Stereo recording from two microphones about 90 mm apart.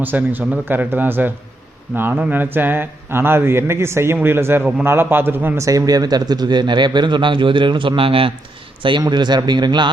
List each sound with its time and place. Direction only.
0.0 s speech: 20° right (ahead or behind)
5.6 s speech: 40° right (ahead or behind); by 8.3 s 90° right
9.0 s speech: 55° right (ahead or behind)